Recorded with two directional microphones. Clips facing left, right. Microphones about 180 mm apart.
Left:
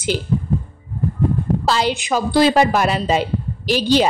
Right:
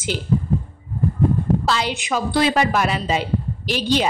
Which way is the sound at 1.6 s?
35° left (ahead or behind).